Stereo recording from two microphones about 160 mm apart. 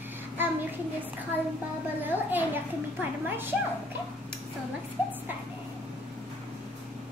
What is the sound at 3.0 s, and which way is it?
Speech, 15° right (ahead or behind).